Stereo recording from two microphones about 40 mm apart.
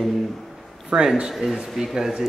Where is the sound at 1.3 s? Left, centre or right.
Centre.